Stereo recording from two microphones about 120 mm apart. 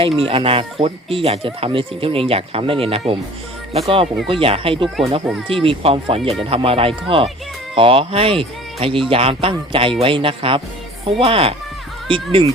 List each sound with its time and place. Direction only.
0.2 s speech: 50° right (ahead or behind)